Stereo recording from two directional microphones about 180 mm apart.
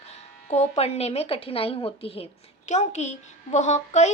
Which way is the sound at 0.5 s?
35° left (ahead or behind).